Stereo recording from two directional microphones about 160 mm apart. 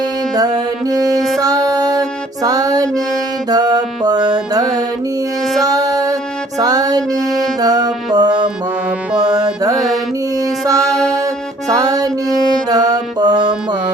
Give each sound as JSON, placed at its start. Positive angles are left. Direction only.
{"t": 0.3, "sound": "music", "side_deg": -25}
{"t": 9.1, "sound": "music", "side_deg": -5}
{"t": 9.6, "sound": "mantra", "side_deg": -25}
{"t": 10.3, "sound": "music", "side_deg": -20}
{"t": 10.9, "sound": "music", "side_deg": 5}
{"t": 11.7, "sound": "music", "side_deg": -20}